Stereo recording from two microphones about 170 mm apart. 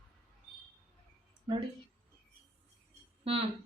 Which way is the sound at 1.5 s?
30° right (ahead or behind).